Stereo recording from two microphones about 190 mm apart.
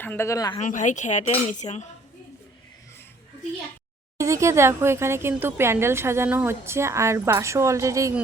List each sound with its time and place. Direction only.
0.0 s speech: 10° left (ahead or behind)
0.6 s cutlery: 40° left (ahead or behind)
4.2 s speech: 15° right (ahead or behind)